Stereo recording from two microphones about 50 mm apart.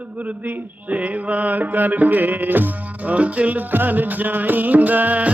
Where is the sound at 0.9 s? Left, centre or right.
Right.